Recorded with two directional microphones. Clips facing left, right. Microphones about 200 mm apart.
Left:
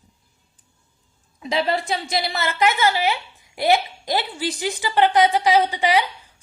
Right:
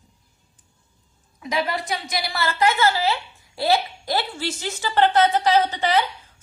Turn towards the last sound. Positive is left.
turn(degrees=15)  # may be behind; listen again after turning